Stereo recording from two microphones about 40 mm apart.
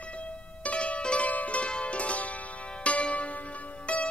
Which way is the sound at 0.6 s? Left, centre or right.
Left.